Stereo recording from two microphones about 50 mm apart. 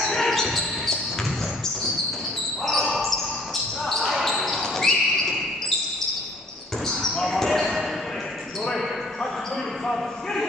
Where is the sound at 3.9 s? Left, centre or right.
Centre.